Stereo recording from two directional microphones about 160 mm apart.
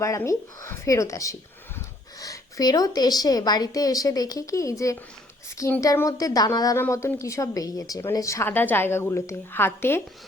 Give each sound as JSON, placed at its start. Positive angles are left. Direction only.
{"t": 0.0, "sound": "speech", "side_deg": 20}